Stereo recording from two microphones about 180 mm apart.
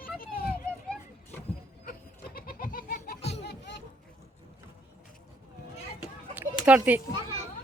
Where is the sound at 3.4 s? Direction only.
70° left (ahead or behind).